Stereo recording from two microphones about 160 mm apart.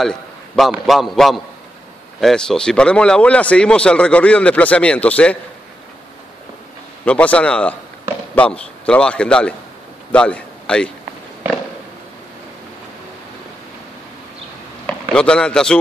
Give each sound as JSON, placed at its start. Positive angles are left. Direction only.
{"t": 0.0, "sound": "a man's voice", "side_deg": 0}
{"t": 7.1, "sound": "a man's voice", "side_deg": 10}
{"t": 14.9, "sound": "speech", "side_deg": 5}